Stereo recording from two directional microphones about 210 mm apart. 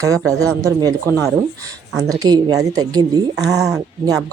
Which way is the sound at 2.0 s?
15° right (ahead or behind).